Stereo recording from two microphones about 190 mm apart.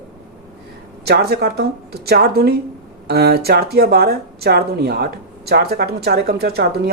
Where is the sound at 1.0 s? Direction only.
55° right (ahead or behind).